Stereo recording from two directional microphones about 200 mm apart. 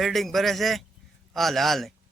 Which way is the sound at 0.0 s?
Centre (ahead or behind).